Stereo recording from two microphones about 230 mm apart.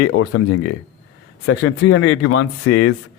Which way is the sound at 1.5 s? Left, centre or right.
Left.